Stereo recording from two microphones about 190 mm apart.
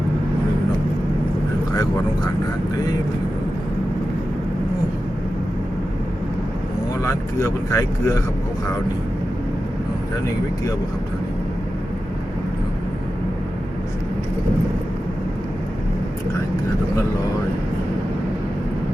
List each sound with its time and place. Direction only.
7.0 s speech: 15° left (ahead or behind)